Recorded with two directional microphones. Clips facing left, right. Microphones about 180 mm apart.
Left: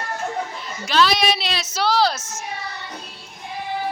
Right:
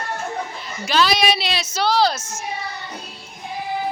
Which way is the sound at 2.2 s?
20° left (ahead or behind).